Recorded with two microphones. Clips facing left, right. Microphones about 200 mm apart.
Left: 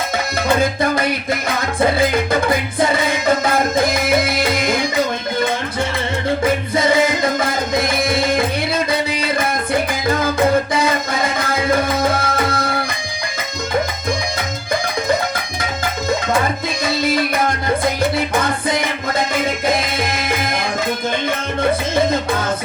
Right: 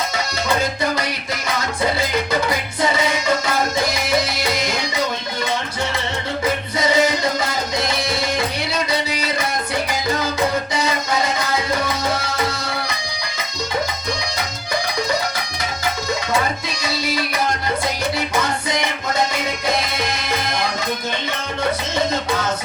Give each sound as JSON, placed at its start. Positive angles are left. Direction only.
{"t": 0.4, "sound": "music", "side_deg": 55}
{"t": 6.7, "sound": "music", "side_deg": 55}
{"t": 16.8, "sound": "music", "side_deg": 50}
{"t": 21.7, "sound": "music", "side_deg": 55}